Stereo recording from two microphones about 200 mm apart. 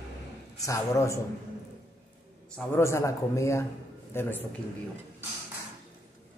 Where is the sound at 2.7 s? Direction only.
15° left (ahead or behind).